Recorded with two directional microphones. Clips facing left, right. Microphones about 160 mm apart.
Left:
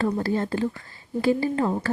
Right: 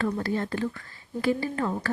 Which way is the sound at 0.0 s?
30° left (ahead or behind).